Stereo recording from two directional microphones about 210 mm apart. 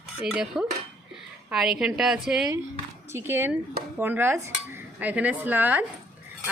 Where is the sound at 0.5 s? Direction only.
Centre (ahead or behind).